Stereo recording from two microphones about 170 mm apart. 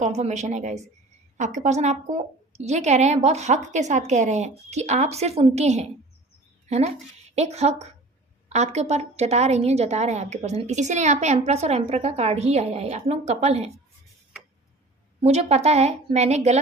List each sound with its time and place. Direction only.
0.0 s a woman's voice: 40° right (ahead or behind)
15.2 s a woman's voice: 40° right (ahead or behind)